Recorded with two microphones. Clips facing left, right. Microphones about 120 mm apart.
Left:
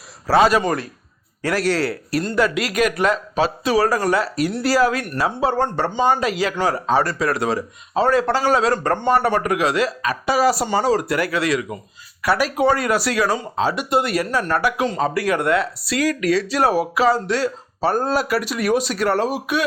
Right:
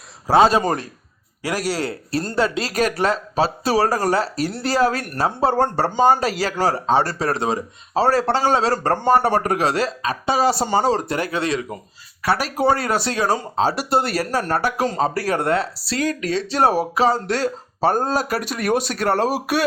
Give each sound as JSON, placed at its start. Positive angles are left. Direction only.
{"t": 0.3, "sound": "speech", "side_deg": -25}
{"t": 1.4, "sound": "speech", "side_deg": -10}
{"t": 1.9, "sound": "speech", "side_deg": -30}
{"t": 17.2, "sound": "speech", "side_deg": -45}
{"t": 19.3, "sound": "speech", "side_deg": -35}